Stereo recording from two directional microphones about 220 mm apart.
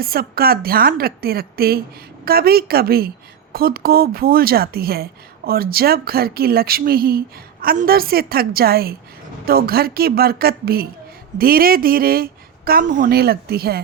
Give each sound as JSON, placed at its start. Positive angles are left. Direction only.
{"t": 0.0, "sound": "speech", "side_deg": -45}